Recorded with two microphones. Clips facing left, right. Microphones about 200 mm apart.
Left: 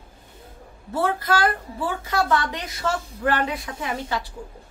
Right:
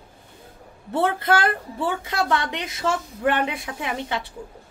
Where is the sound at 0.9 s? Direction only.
25° right (ahead or behind).